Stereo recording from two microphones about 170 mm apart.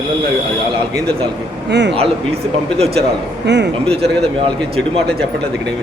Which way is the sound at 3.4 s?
85° right.